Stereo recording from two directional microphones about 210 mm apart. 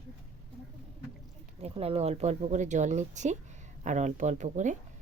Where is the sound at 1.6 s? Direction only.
25° right (ahead or behind).